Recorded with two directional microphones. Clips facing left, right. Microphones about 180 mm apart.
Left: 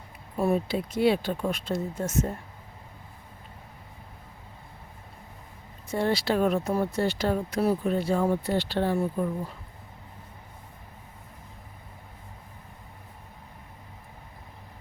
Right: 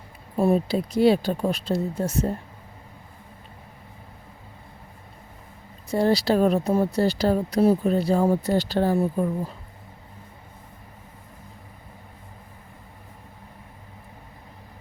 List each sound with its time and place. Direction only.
0.3 s speech: 30° right (ahead or behind)
5.9 s speech: 40° right (ahead or behind)